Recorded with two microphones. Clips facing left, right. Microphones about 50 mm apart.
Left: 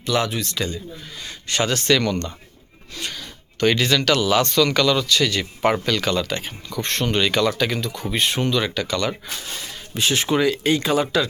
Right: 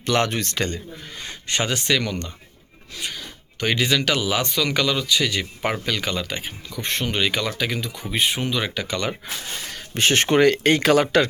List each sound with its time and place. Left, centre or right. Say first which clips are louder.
0.0 s speech: right 1 dB; right
1.2 s speech: left 2 dB; right
9.6 s speech: right 2 dB; right